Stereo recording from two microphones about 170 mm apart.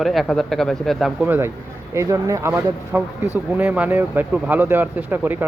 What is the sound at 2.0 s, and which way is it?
Speech, 20° right (ahead or behind).